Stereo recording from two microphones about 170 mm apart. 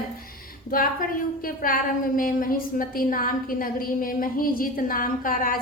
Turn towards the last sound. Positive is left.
turn(degrees=55)  # may be behind; listen again after turning